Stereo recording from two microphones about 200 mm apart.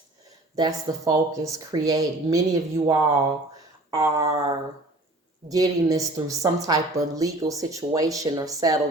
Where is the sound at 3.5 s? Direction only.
15° right (ahead or behind).